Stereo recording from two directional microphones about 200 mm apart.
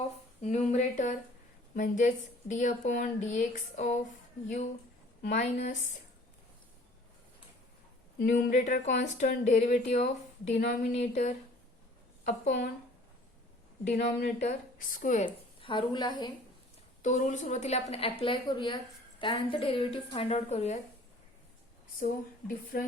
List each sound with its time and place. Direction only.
0.4 s a woman's voice: 35° left (ahead or behind)
5.2 s a woman's voice: 35° left (ahead or behind)
8.2 s a woman's voice: 40° left (ahead or behind)
13.8 s a woman's voice: 40° left (ahead or behind)
15.3 s a woman's voice: 25° left (ahead or behind)
17.0 s a woman's voice: 40° left (ahead or behind)
22.0 s speech: 45° left (ahead or behind)